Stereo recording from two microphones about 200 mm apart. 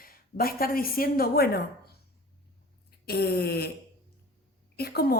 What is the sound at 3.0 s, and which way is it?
Speech, 50° left (ahead or behind).